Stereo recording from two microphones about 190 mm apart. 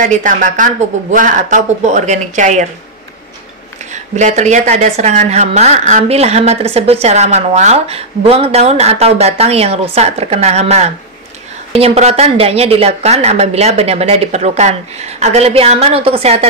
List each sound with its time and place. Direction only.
0.0 s speech: 40° right (ahead or behind)
3.9 s speech: 40° right (ahead or behind)